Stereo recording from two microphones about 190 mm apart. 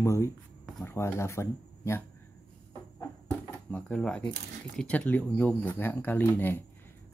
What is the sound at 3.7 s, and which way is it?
Speech, 5° left (ahead or behind).